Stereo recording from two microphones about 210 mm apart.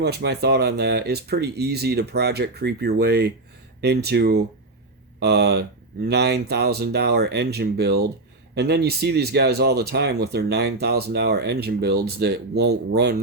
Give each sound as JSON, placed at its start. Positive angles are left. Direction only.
{"t": 0.0, "sound": "speech", "side_deg": -50}